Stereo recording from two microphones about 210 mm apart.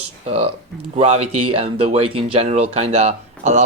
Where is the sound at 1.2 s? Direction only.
90° right.